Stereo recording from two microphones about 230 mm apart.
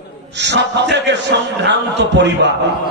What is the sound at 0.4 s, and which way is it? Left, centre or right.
A man's voice, right.